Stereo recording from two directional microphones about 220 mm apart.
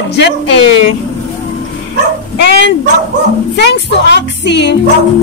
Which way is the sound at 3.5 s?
50° left (ahead or behind).